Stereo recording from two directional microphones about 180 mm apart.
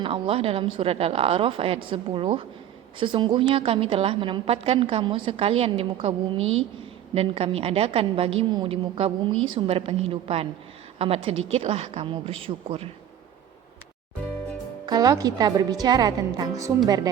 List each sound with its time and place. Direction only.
0.0 s a woman's voice: 30° right (ahead or behind)
14.8 s a woman's voice: 20° right (ahead or behind)